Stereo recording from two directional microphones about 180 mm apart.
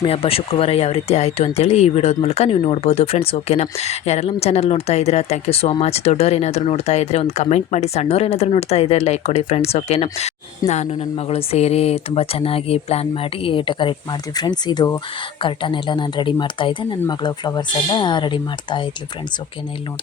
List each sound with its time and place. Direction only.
0.0 s speech: 30° left (ahead or behind)
10.6 s speech: 20° left (ahead or behind)
11.3 s speech: 35° left (ahead or behind)